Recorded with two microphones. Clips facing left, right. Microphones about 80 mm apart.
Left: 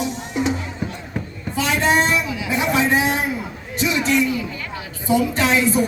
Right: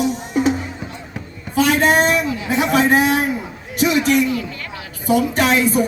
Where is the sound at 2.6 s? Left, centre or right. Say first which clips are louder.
Right 3 dB; right.